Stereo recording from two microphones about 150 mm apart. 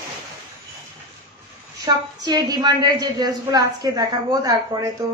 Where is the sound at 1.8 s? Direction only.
25° right (ahead or behind).